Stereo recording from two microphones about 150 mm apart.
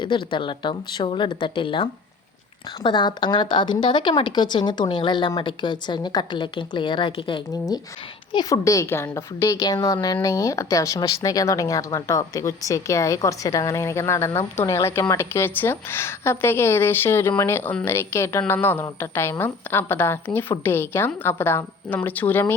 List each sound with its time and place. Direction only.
0.0 s a woman's voice: 30° left (ahead or behind); by 22.5 s 15° left (ahead or behind)